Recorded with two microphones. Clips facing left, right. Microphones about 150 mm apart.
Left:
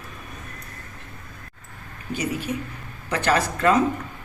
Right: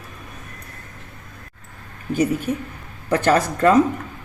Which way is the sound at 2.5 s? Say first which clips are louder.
Right 4 dB; 50° right (ahead or behind).